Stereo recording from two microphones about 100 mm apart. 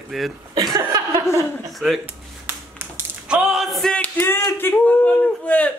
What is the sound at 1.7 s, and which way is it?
Speech, centre (ahead or behind).